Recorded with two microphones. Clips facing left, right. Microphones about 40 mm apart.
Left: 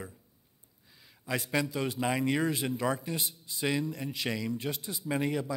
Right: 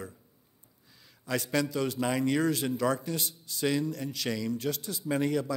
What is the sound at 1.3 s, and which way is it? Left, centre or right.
A man's voice, centre.